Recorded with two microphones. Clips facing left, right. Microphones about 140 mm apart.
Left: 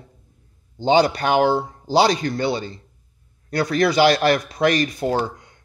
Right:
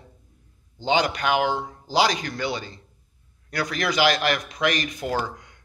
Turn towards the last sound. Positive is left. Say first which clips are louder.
# left 5 dB
turn(degrees=30)  # may be behind; listen again after turning